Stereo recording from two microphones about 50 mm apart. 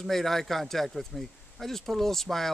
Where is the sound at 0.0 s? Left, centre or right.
Centre.